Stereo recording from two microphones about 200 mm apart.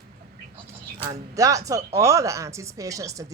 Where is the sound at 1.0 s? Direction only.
15° right (ahead or behind).